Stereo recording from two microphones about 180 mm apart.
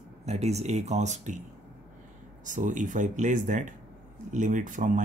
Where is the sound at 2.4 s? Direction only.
45° right (ahead or behind).